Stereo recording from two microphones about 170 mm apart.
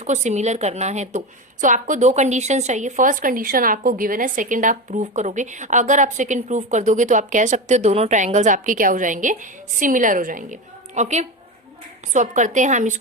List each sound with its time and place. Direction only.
0.0 s speech: 45° right (ahead or behind)